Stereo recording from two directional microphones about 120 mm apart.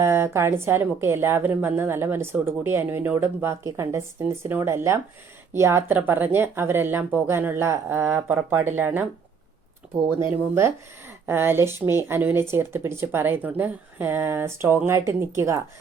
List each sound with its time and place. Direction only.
0.0 s a woman's voice: 20° right (ahead or behind)
10.2 s a woman's voice: 25° right (ahead or behind)